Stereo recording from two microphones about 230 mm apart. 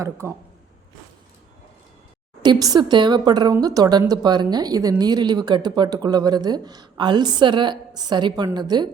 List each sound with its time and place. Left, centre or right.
0.0 s speech: centre
2.4 s speech: centre